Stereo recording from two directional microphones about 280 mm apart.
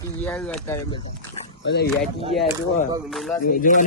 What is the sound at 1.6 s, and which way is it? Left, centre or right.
Speech, left.